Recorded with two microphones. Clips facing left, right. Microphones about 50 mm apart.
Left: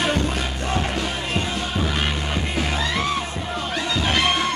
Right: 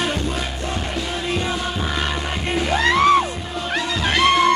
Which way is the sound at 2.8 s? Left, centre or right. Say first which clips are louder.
Right 13 dB; right.